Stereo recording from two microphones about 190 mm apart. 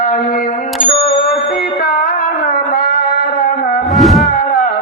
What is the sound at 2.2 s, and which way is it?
Music, 45° left (ahead or behind).